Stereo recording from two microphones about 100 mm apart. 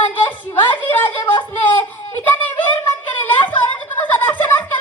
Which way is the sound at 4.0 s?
20° left (ahead or behind).